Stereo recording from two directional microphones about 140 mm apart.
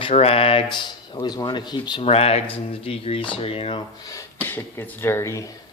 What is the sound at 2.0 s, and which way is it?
Speech, 45° left (ahead or behind).